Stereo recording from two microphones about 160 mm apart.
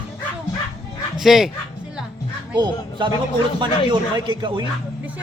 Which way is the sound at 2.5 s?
30° right (ahead or behind).